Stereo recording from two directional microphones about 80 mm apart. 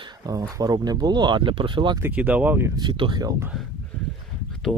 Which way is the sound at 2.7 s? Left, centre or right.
Right.